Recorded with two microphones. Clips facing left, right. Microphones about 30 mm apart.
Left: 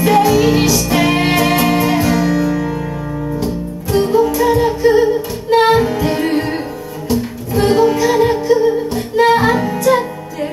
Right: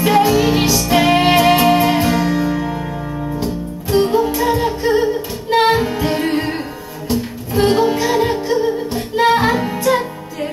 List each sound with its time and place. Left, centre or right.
0.0 s music: right
3.9 s music: right
4.4 s music: right
5.5 s music: centre
5.8 s music: right
7.5 s music: right
8.0 s music: centre
9.8 s music: centre